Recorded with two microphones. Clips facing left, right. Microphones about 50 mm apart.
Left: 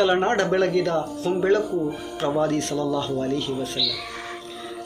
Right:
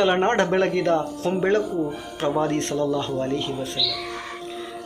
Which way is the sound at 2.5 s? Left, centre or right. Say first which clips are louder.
Right 1 dB; right.